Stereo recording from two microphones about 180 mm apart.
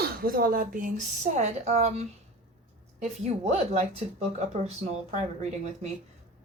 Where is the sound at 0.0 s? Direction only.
55° right (ahead or behind); by 2.0 s 40° right (ahead or behind).